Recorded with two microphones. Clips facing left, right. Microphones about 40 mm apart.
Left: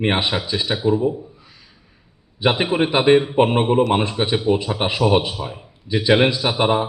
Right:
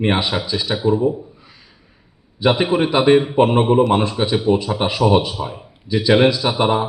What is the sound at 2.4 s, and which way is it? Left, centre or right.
A man's voice, centre.